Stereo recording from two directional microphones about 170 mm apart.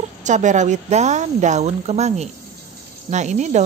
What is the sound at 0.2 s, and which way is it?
A woman's voice, 45° right (ahead or behind).